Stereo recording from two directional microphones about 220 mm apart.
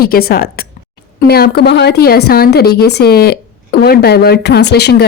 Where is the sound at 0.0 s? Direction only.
45° left (ahead or behind).